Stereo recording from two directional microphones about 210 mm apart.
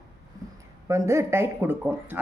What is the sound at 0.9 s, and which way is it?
Speech, 15° right (ahead or behind).